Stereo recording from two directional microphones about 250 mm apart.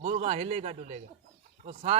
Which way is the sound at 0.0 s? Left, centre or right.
Right.